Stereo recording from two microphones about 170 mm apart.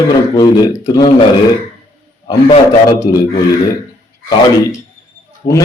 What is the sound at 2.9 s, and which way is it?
Speech, 25° left (ahead or behind).